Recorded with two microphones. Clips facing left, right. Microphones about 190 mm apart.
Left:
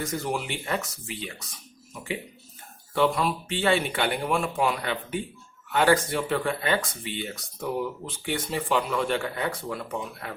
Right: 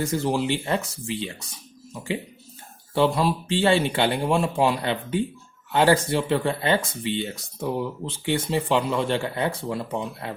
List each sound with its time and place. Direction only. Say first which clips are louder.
0.0 s speech: right 6 dB; 30° right (ahead or behind)
2.9 s speech: right 3 dB; 30° right (ahead or behind)